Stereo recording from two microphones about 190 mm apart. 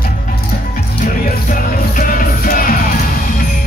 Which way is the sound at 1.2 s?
45° left (ahead or behind).